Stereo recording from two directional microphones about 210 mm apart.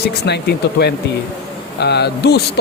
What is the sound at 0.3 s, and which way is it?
Speech, 50° left (ahead or behind).